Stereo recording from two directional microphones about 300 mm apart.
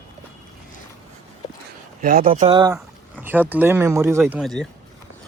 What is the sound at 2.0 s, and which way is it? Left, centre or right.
Speech, right.